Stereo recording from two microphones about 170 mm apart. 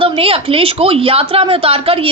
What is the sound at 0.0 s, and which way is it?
A woman's voice, 35° right (ahead or behind).